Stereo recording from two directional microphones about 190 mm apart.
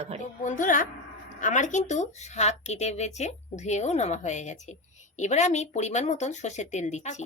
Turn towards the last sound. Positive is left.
turn(degrees=35)  # may be behind; listen again after turning